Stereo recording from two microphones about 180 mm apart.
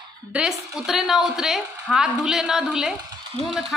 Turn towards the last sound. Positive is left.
turn(degrees=0)  # may be behind; listen again after turning